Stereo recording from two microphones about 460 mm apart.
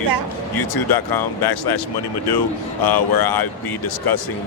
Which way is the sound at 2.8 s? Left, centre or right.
Left.